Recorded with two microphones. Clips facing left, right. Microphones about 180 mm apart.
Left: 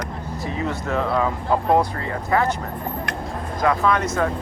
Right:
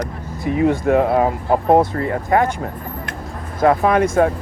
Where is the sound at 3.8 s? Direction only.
50° right (ahead or behind).